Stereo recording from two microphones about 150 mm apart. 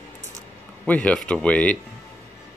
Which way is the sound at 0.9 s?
10° left (ahead or behind).